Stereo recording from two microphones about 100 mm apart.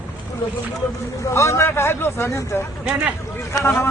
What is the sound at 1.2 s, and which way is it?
Speech, 30° left (ahead or behind).